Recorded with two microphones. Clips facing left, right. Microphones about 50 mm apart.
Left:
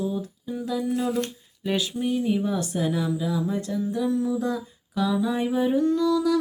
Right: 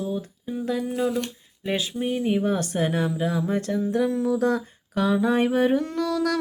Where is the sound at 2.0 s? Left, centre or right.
Right.